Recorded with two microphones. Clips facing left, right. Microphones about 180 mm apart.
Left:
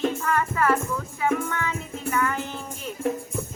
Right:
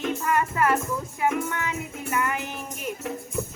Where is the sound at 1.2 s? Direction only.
15° right (ahead or behind).